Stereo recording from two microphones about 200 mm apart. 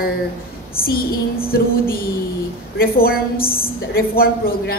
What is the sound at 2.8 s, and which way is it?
A woman's voice, 50° left (ahead or behind).